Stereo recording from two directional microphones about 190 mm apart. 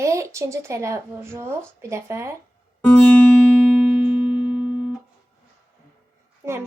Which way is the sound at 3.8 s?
5° right (ahead or behind).